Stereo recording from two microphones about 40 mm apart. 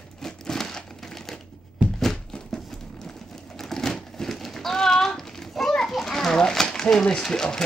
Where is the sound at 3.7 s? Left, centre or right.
Centre.